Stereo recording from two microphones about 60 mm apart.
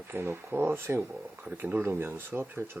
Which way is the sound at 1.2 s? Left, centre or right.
Right.